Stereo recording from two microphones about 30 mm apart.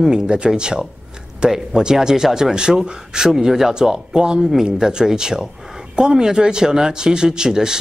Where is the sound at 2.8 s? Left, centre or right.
Right.